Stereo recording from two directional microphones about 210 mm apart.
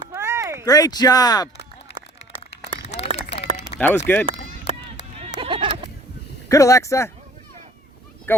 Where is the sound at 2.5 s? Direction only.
55° left (ahead or behind).